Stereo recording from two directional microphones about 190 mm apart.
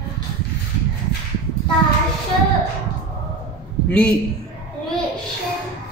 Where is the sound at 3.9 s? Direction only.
5° left (ahead or behind).